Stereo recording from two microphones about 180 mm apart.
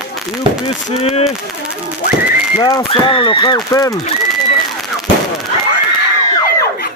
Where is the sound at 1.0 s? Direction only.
35° left (ahead or behind).